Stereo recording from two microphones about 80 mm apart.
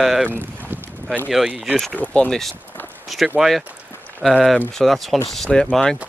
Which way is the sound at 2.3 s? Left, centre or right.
Centre.